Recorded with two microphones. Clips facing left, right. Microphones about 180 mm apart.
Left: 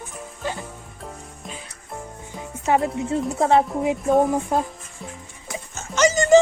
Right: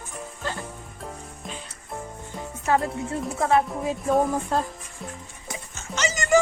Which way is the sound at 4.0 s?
Centre (ahead or behind).